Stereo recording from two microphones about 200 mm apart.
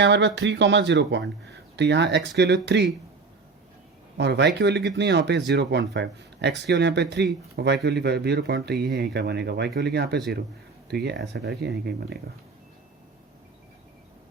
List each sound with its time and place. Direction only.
0.0 s speech: 60° right (ahead or behind)
4.2 s speech: 60° right (ahead or behind)